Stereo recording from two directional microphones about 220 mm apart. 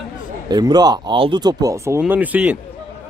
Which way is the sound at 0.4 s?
20° right (ahead or behind).